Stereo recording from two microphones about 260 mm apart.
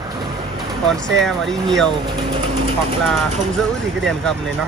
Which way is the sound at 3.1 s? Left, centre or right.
Centre.